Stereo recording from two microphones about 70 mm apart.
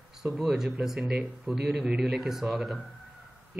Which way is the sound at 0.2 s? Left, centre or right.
Centre.